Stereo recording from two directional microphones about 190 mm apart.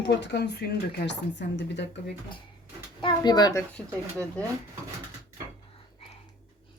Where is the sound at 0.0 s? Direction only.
65° left (ahead or behind).